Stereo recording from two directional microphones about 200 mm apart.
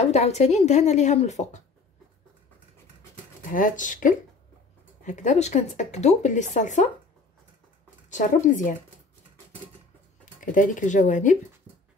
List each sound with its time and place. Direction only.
0.0 s speech: 35° left (ahead or behind)
3.5 s speech: 40° left (ahead or behind)
8.1 s speech: 40° left (ahead or behind)
10.4 s speech: 40° left (ahead or behind)